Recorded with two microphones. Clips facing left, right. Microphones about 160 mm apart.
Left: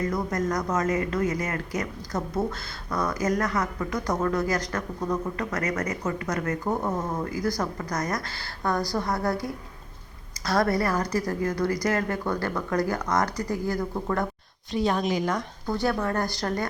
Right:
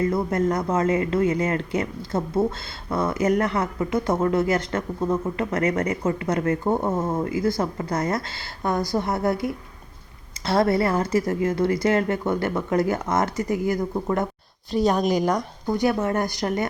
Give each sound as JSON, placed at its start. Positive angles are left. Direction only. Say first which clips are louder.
{"t": 0.0, "sound": "speech", "louder": "right 5 dB", "side_deg": -30}
{"t": 14.7, "sound": "speech", "louder": "right 4 dB", "side_deg": -40}
{"t": 15.6, "sound": "speech", "louder": "right 4 dB", "side_deg": -20}